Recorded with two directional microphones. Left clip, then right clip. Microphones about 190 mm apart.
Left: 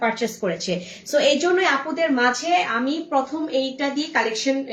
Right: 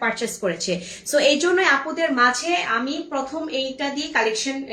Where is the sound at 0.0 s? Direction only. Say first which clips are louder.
Left 1 dB; 20° right (ahead or behind).